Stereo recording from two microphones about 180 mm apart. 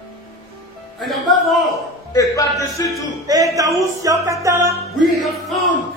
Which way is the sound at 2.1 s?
20° left (ahead or behind).